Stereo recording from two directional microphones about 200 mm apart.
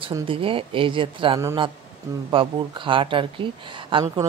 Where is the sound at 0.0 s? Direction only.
25° right (ahead or behind).